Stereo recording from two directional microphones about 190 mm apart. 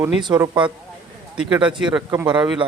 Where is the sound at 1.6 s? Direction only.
25° right (ahead or behind).